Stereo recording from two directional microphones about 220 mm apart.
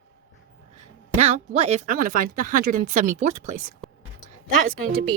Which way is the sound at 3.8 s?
Centre (ahead or behind).